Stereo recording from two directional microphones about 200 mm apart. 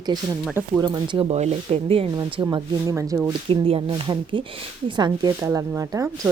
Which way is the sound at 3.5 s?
25° right (ahead or behind).